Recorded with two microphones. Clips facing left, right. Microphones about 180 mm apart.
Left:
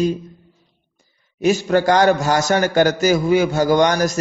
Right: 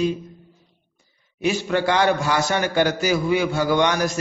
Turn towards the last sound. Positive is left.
turn(degrees=40)  # may be behind; listen again after turning